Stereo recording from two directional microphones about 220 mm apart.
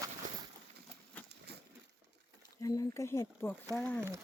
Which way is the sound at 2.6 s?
15° left (ahead or behind).